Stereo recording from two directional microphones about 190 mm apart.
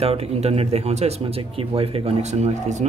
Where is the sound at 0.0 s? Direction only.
30° right (ahead or behind).